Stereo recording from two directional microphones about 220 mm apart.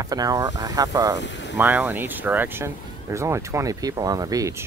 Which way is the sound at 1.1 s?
55° left (ahead or behind).